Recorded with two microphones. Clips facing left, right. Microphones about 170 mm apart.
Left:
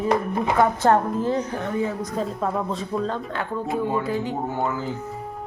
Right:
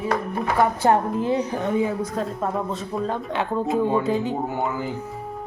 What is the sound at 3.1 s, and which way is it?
Speech, 20° right (ahead or behind).